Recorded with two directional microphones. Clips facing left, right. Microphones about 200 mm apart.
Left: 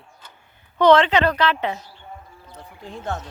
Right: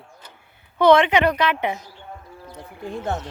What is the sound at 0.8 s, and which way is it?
A woman's voice, 10° right (ahead or behind).